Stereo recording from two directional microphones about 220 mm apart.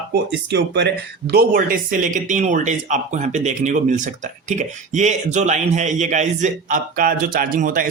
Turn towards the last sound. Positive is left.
turn(degrees=-40)  # may be behind; listen again after turning